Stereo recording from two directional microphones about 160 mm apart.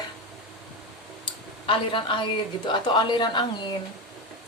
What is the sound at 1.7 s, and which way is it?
A woman's voice, 30° left (ahead or behind).